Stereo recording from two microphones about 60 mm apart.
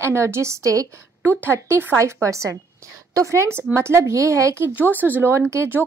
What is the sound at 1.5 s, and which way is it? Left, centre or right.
Speech, right.